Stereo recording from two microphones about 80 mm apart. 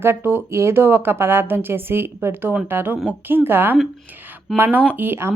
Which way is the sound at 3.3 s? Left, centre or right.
Right.